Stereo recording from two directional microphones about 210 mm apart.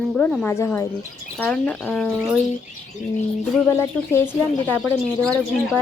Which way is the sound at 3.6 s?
10° left (ahead or behind).